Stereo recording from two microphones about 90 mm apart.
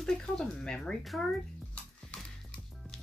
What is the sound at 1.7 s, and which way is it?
Music, 15° left (ahead or behind).